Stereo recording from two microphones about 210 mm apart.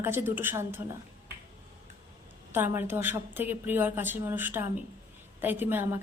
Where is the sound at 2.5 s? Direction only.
10° right (ahead or behind).